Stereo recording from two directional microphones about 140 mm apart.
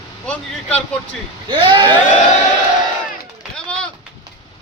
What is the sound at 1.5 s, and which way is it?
Speech, 35° right (ahead or behind).